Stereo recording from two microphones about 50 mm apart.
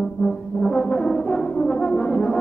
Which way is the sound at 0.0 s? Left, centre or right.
Left.